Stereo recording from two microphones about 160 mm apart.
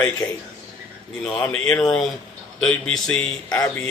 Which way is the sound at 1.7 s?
10° left (ahead or behind).